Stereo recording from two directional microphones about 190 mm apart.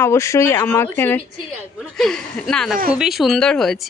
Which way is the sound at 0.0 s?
15° left (ahead or behind).